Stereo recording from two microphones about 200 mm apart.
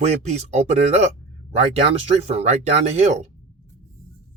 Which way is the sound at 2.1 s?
30° right (ahead or behind).